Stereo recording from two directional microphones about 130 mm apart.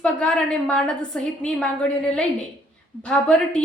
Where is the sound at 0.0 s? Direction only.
10° left (ahead or behind).